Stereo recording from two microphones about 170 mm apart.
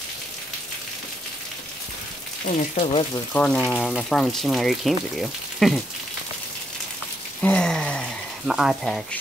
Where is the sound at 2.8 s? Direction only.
35° left (ahead or behind).